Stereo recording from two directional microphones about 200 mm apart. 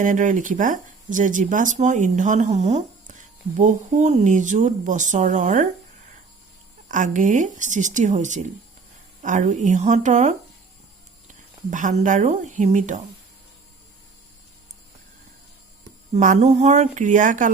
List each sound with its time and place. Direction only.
0.0 s speech: 40° right (ahead or behind)
6.8 s speech: 40° right (ahead or behind)
11.7 s speech: 40° right (ahead or behind)
16.1 s speech: 35° right (ahead or behind)